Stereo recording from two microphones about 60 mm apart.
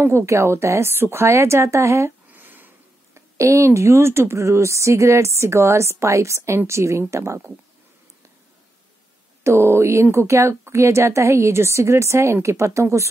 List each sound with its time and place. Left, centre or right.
0.0 s a woman's voice: right
2.3 s a sound: right
3.2 s a woman's voice: right
9.4 s a woman's voice: right